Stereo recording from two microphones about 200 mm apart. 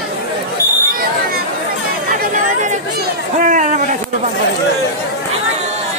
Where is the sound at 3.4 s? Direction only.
40° right (ahead or behind).